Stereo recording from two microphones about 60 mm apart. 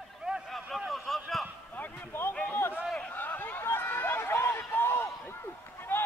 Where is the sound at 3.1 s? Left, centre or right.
Left.